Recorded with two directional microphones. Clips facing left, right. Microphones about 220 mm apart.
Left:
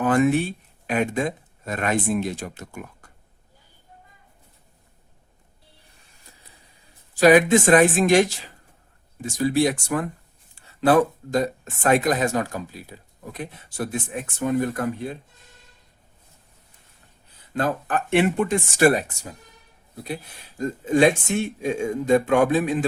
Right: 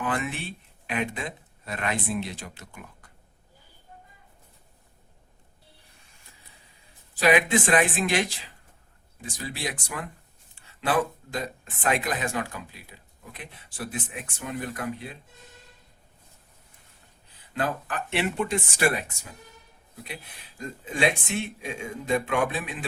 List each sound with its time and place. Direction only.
0.0 s speech: 45° left (ahead or behind)
7.2 s speech: 40° left (ahead or behind)
9.4 s speech: 45° left (ahead or behind)
17.5 s speech: 45° left (ahead or behind)
20.6 s speech: 45° left (ahead or behind)